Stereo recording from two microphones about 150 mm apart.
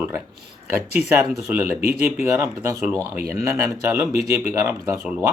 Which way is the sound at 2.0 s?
15° right (ahead or behind).